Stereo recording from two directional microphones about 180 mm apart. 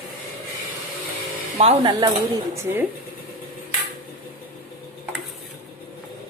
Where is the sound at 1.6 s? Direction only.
35° right (ahead or behind).